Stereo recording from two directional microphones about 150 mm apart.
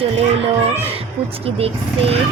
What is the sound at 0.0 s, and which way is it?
A woman's voice, 40° right (ahead or behind).